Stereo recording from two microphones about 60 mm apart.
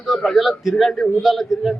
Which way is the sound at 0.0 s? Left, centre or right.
Centre.